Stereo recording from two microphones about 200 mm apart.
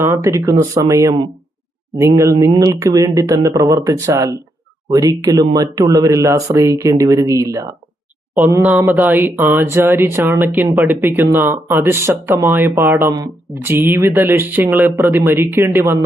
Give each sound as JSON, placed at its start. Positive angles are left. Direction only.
{"t": 0.0, "sound": "speech", "side_deg": -15}